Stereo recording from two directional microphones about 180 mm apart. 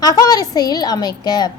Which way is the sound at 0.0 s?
20° left (ahead or behind).